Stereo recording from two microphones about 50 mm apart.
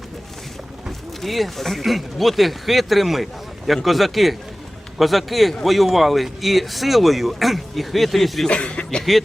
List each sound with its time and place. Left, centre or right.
1.2 s speech: centre
8.4 s speech: left